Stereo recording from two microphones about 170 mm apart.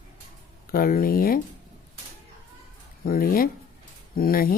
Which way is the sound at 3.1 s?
55° left (ahead or behind).